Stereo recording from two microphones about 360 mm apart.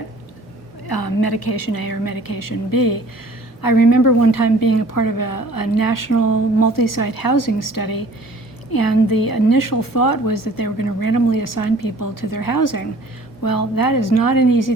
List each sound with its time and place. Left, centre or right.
0.9 s a woman's voice: left